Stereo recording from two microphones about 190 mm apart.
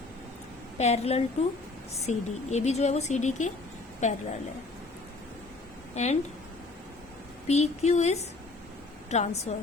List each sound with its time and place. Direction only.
0.8 s speech: 35° left (ahead or behind)
5.9 s a woman's voice: 35° left (ahead or behind)
7.4 s speech: 35° left (ahead or behind)